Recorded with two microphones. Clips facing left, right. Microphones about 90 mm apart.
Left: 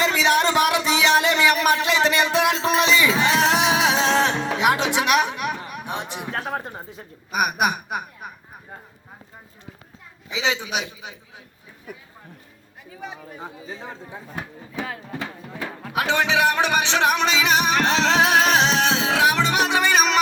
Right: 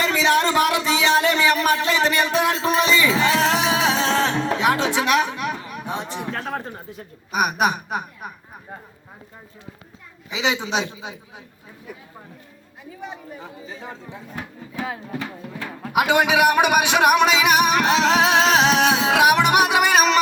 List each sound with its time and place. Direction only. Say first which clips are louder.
0.0 s a sound: even; 20° left (ahead or behind)
7.3 s speech: right 1 dB; centre (ahead or behind)
10.3 s a woman's voice: right 2 dB; 20° right (ahead or behind)
14.7 s music: right 3 dB; 10° right (ahead or behind)
18.0 s speech: right 1 dB; 5° right (ahead or behind)
18.6 s music: right 3 dB; 5° right (ahead or behind)